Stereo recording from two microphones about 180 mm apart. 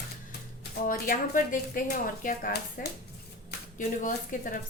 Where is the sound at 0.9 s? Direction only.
50° left (ahead or behind).